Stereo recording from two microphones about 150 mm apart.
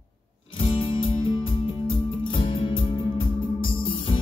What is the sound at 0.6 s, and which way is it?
Music, 35° left (ahead or behind).